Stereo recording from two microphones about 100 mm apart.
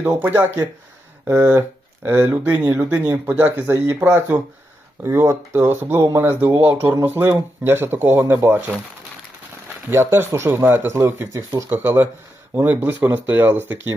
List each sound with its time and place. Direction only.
0.0 s speech: 20° right (ahead or behind)
1.3 s a sound: 15° right (ahead or behind)
2.0 s speech: 25° right (ahead or behind)
9.9 s speech: 25° right (ahead or behind)